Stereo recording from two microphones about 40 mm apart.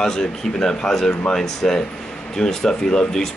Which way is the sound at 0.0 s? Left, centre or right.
Centre.